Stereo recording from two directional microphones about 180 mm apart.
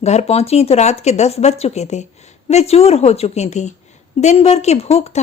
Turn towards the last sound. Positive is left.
turn(degrees=35)  # may be behind; listen again after turning